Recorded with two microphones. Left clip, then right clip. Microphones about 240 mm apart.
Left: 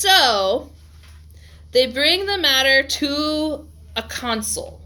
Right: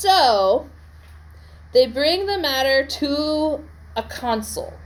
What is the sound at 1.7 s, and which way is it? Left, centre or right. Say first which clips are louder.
Speech: even; left.